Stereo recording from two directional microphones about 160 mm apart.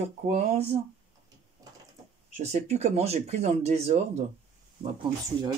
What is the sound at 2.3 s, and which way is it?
Speech, 45° right (ahead or behind).